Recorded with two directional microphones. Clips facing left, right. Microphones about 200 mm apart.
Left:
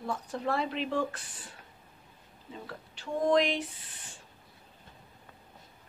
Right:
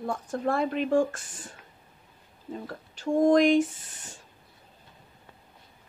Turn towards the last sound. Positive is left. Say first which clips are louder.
# right 3 dB
turn(degrees=-45)  # may be behind; listen again after turning